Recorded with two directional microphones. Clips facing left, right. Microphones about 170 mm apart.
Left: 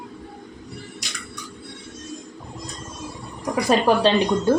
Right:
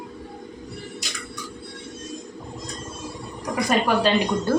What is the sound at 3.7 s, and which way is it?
Speech, 30° left (ahead or behind).